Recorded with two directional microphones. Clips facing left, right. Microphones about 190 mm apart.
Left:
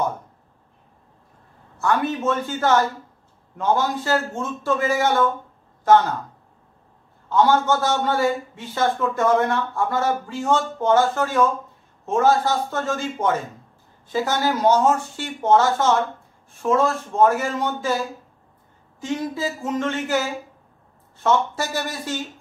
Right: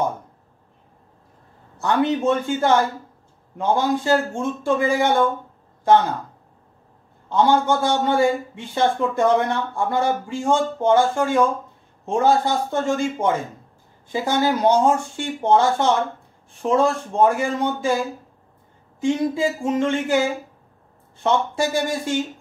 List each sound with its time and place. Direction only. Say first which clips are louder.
1.8 s speech: right 2 dB; 20° right (ahead or behind)
7.2 s speech: even; 15° right (ahead or behind)
18.9 s speech: right 6 dB; 15° right (ahead or behind)